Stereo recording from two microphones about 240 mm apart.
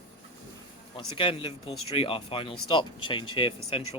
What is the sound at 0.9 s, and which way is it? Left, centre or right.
Speech, left.